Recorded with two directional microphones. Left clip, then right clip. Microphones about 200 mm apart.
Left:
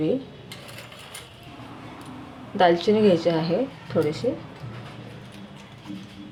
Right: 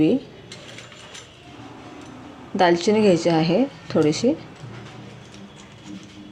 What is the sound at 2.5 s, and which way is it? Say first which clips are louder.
Speech: right 1 dB; 40° right (ahead or behind).